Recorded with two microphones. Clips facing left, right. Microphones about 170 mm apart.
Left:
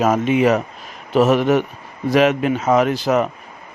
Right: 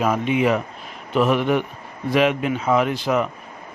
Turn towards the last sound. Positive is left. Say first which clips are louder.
# left 4 dB
turn(degrees=40)  # may be behind; listen again after turning